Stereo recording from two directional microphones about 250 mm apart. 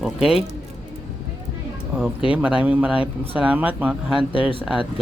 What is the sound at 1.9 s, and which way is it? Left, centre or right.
Speech, centre.